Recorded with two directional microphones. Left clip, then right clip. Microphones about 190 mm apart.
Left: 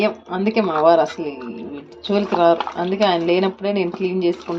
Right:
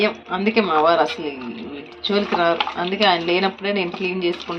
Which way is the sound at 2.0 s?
50° left (ahead or behind).